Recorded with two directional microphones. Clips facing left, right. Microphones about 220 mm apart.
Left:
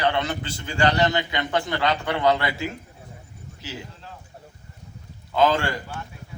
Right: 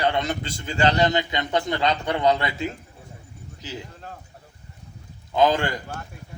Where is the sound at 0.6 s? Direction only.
20° right (ahead or behind).